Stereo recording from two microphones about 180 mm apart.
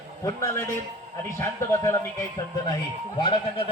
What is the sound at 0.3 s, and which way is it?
A man's voice, 15° left (ahead or behind).